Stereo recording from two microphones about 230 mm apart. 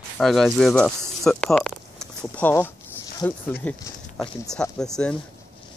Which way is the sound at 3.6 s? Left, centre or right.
Centre.